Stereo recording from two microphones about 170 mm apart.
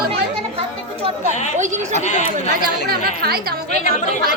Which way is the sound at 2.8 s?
65° right (ahead or behind).